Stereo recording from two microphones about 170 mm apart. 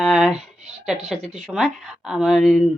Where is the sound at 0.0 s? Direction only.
Centre (ahead or behind).